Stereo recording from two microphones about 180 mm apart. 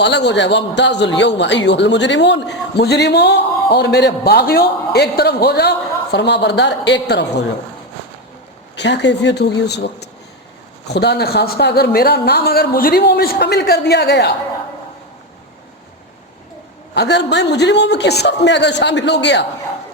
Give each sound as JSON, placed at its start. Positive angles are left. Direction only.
{"t": 0.0, "sound": "a man's voice", "side_deg": 75}
{"t": 8.7, "sound": "a man's voice", "side_deg": 75}
{"t": 16.9, "sound": "a man's voice", "side_deg": 70}